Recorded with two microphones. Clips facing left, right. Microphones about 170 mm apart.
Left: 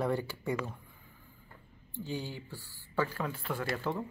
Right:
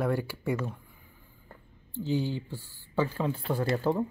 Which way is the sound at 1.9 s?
20° right (ahead or behind).